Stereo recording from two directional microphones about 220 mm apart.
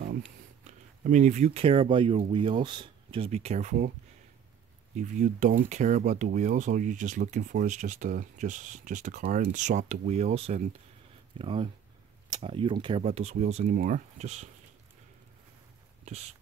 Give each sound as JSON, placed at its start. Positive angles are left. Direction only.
{"t": 0.7, "sound": "speech", "side_deg": -35}
{"t": 4.9, "sound": "speech", "side_deg": -35}
{"t": 16.1, "sound": "speech", "side_deg": -30}